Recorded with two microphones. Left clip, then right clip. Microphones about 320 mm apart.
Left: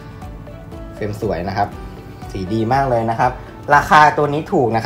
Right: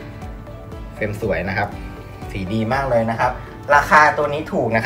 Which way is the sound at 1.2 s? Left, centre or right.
Centre.